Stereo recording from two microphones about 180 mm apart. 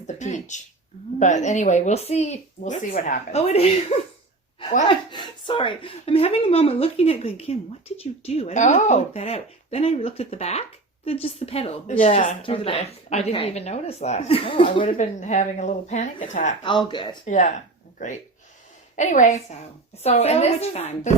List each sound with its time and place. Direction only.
0.1 s speech: 40° left (ahead or behind)
14.9 s a woman's voice: 40° left (ahead or behind)
16.9 s speech: 25° left (ahead or behind)
17.2 s speech: 40° left (ahead or behind)
18.9 s a woman's voice: 45° left (ahead or behind)